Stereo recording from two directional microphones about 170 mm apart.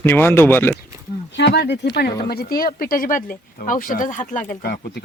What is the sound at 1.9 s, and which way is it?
Speech, 65° left (ahead or behind).